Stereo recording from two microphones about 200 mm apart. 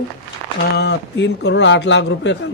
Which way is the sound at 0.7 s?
60° left (ahead or behind).